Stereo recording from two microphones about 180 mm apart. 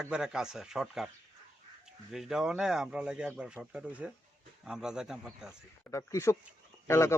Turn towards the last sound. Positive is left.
turn(degrees=15)  # may be behind; listen again after turning